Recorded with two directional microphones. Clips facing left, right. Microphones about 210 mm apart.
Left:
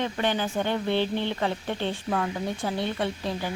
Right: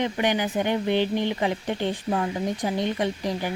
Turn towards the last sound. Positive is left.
turn(degrees=-15)  # may be behind; listen again after turning